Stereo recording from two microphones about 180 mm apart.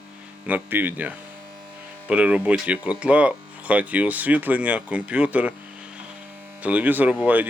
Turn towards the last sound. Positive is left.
turn(degrees=-10)  # may be behind; listen again after turning